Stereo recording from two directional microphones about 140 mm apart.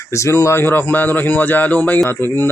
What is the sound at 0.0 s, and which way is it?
Speech, 20° left (ahead or behind).